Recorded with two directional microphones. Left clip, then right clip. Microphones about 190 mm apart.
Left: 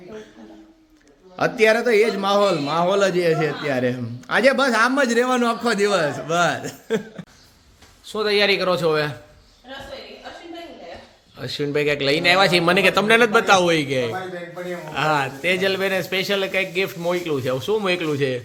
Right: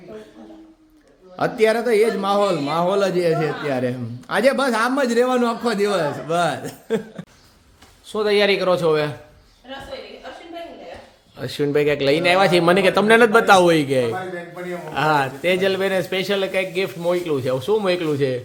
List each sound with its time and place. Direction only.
1.4 s a man's voice: centre (ahead or behind)
11.3 s a man's voice: 30° right (ahead or behind); by 18.4 s 10° right (ahead or behind)